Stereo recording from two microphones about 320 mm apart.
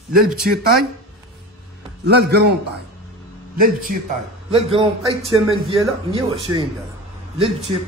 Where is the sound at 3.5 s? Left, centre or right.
Right.